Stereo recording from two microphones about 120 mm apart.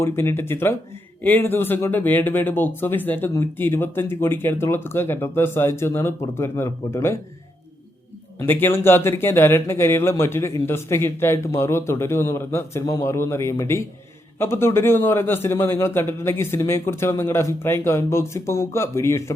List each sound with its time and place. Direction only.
0.0 s speech: 20° left (ahead or behind)
8.4 s speech: 20° left (ahead or behind)